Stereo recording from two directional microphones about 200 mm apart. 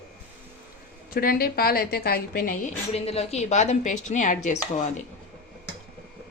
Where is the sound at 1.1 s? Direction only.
45° left (ahead or behind).